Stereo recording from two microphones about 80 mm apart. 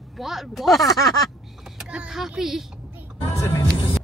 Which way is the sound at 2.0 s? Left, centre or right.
Centre.